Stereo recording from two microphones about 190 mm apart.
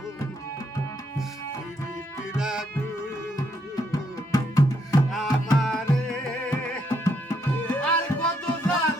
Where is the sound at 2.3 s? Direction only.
5° right (ahead or behind).